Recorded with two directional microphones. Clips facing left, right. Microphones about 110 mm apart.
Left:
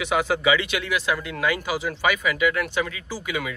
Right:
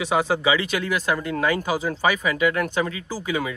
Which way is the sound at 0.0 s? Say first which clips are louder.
Right 1 dB; 30° right (ahead or behind).